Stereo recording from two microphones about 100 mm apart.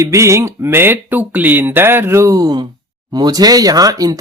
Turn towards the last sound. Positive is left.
turn(degrees=-35)  # may be behind; listen again after turning